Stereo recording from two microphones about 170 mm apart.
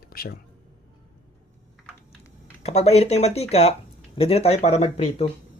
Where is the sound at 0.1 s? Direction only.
60° left (ahead or behind).